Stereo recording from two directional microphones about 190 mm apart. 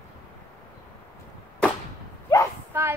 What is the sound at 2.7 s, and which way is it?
Speech, 15° right (ahead or behind).